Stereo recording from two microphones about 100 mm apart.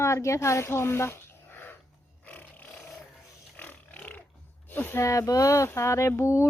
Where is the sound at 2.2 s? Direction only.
20° left (ahead or behind).